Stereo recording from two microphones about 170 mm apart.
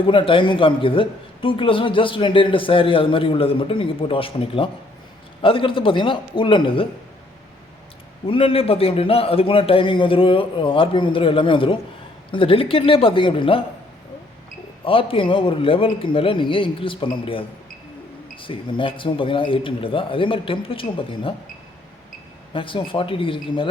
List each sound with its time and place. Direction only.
0.0 s a man's voice: 30° left (ahead or behind)
8.3 s a man's voice: 30° left (ahead or behind)
14.8 s a man's voice: 30° left (ahead or behind)
22.5 s a man's voice: 30° left (ahead or behind)